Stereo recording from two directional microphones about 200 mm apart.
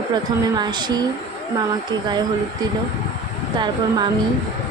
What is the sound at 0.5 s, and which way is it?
Speech, 20° right (ahead or behind).